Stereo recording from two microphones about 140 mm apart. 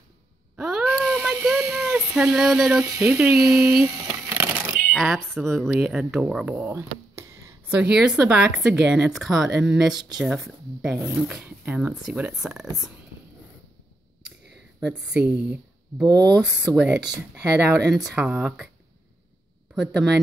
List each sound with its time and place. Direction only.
0.6 s a sound: 5° right (ahead or behind)
3.1 s speech: 10° right (ahead or behind)
3.9 s a sound: 25° right (ahead or behind)
4.9 s speech: centre (ahead or behind)
7.2 s a sound: 20° right (ahead or behind)
7.7 s speech: 5° right (ahead or behind)
14.9 s speech: 10° right (ahead or behind)
16.1 s speech: 30° right (ahead or behind)
16.4 s speech: 5° right (ahead or behind)